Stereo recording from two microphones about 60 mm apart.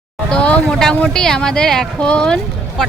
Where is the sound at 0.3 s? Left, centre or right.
Centre.